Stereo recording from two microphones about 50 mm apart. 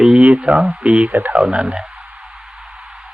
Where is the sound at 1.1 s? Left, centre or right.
Right.